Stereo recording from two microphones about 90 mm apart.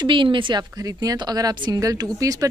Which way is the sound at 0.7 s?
45° right (ahead or behind).